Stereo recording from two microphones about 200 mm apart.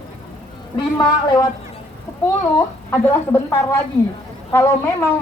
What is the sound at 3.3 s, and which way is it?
A woman's voice, 15° left (ahead or behind).